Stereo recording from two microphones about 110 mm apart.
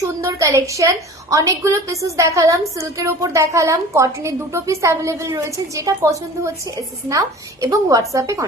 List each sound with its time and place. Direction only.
0.0 s a woman's voice: 30° right (ahead or behind)